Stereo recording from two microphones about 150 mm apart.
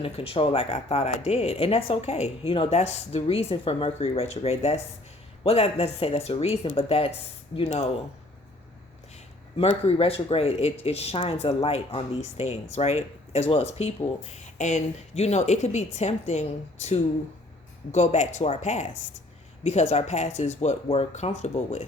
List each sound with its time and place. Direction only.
0.0 s speech: 35° left (ahead or behind)
9.6 s speech: 40° left (ahead or behind)